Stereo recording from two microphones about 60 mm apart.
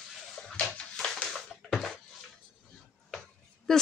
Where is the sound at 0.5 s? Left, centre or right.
Centre.